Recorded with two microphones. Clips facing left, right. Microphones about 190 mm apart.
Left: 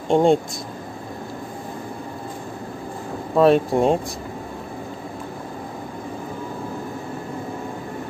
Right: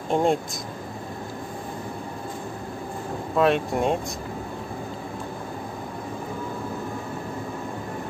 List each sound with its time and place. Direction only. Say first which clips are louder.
0.1 s speech: left 6 dB; 30° left (ahead or behind)
3.3 s speech: left 6 dB; 35° left (ahead or behind)